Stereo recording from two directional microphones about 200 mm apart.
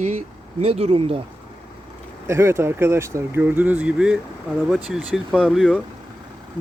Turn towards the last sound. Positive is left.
turn(degrees=0)  # may be behind; listen again after turning